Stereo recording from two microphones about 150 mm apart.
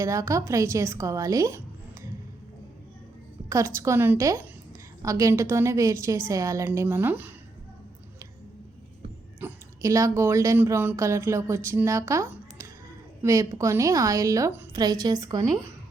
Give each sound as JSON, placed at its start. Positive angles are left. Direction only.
{"t": 0.0, "sound": "speech", "side_deg": -20}
{"t": 3.5, "sound": "a woman's voice", "side_deg": -20}
{"t": 9.4, "sound": "a woman's voice", "side_deg": -20}